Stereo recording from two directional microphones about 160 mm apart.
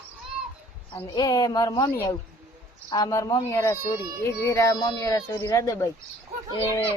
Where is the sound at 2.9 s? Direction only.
20° left (ahead or behind).